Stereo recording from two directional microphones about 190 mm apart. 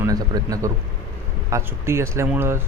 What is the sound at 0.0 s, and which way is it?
A man's voice, 20° right (ahead or behind).